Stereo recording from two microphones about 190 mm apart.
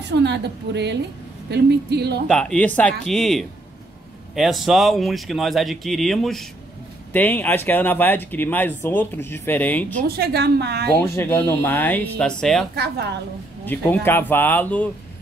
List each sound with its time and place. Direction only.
0.0 s a woman's voice: 65° right (ahead or behind)
2.2 s speech: 5° left (ahead or behind)
10.0 s a woman's voice: 55° right (ahead or behind)
11.1 s speech: 10° left (ahead or behind)
12.7 s a woman's voice: 60° right (ahead or behind)
13.7 s speech: 10° left (ahead or behind)